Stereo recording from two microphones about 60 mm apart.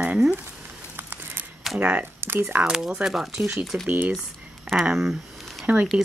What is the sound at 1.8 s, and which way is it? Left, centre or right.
Speech, right.